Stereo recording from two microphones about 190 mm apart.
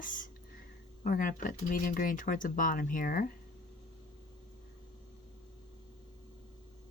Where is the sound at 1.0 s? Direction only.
45° left (ahead or behind).